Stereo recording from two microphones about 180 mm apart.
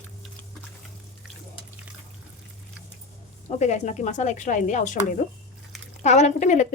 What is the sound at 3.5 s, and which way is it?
Speech, 40° left (ahead or behind).